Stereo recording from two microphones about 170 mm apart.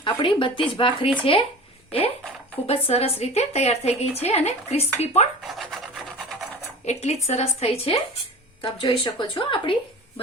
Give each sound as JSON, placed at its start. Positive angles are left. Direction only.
{"t": 0.0, "sound": "speech", "side_deg": 30}
{"t": 2.6, "sound": "speech", "side_deg": 35}
{"t": 5.5, "sound": "rub", "side_deg": 0}
{"t": 6.8, "sound": "speech", "side_deg": 40}